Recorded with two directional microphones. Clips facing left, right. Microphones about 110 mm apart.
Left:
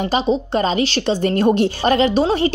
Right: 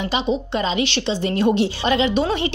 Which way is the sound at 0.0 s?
40° left (ahead or behind).